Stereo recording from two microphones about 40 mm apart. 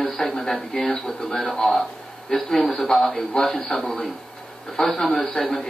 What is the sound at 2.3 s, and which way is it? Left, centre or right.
A man's voice, centre.